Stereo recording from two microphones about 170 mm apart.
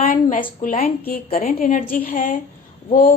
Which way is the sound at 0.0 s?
50° left (ahead or behind).